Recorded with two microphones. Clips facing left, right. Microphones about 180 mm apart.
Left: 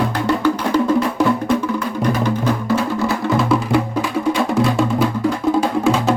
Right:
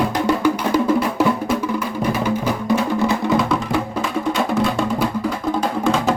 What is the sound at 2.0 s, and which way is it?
Music, 10° right (ahead or behind).